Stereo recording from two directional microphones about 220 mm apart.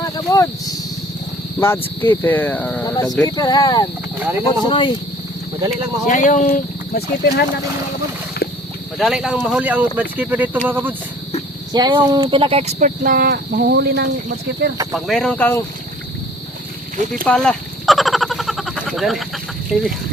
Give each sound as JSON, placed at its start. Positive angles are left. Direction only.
{"t": 0.0, "sound": "a sound", "side_deg": 15}
{"t": 1.5, "sound": "speech", "side_deg": 10}
{"t": 2.9, "sound": "speech", "side_deg": 15}
{"t": 6.1, "sound": "speech", "side_deg": 35}
{"t": 9.0, "sound": "speech", "side_deg": 0}
{"t": 11.7, "sound": "speech", "side_deg": -20}
{"t": 14.9, "sound": "speech", "side_deg": 0}
{"t": 17.2, "sound": "a sound", "side_deg": 5}